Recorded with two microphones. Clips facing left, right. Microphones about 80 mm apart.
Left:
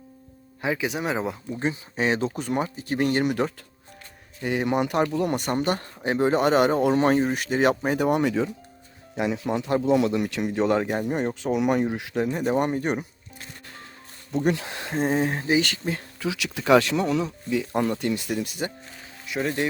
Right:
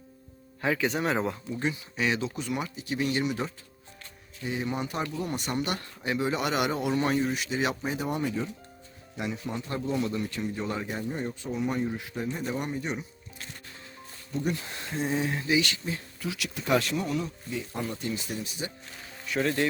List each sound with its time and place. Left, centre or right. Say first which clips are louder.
0.6 s speech: left 1 dB; centre
1.5 s speech: left 6 dB; left
5.5 s speech: left 6 dB; left
14.4 s speech: left 8 dB; left
14.9 s speech: left 5 dB; left
19.3 s speech: left 1 dB; centre